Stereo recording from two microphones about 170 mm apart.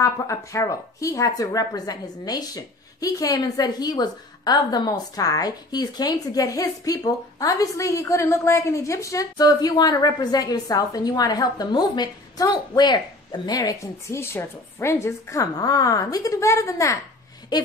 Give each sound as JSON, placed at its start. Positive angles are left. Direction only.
{"t": 0.0, "sound": "speech", "side_deg": 20}